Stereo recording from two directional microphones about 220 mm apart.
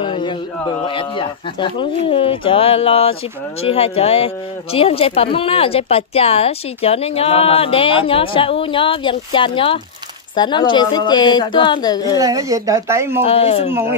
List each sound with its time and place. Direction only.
0.0 s speech: 25° left (ahead or behind)
12.2 s speech: 15° right (ahead or behind)
13.2 s speech: 25° left (ahead or behind)
13.7 s speech: 10° right (ahead or behind)